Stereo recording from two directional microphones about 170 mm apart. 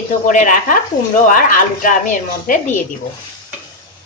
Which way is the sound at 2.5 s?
55° left (ahead or behind).